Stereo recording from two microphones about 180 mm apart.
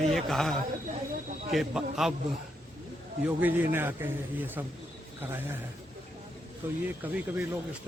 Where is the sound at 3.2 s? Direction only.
10° right (ahead or behind).